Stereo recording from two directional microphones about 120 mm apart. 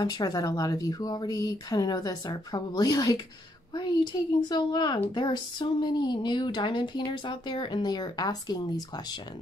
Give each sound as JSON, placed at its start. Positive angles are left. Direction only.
{"t": 0.0, "sound": "speech", "side_deg": 35}